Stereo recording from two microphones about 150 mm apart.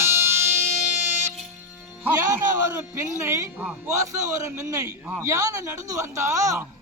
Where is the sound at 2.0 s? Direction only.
20° right (ahead or behind).